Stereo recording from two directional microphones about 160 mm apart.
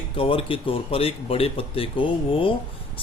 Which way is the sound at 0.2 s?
35° left (ahead or behind).